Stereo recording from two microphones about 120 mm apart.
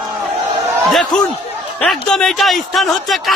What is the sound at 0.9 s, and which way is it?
Speech, centre (ahead or behind).